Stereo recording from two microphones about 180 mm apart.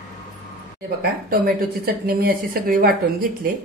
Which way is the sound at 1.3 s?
55° right (ahead or behind).